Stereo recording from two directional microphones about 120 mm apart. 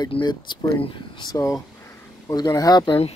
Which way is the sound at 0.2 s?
35° left (ahead or behind).